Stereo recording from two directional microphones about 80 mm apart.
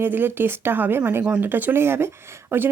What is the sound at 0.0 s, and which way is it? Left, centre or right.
Speech, right.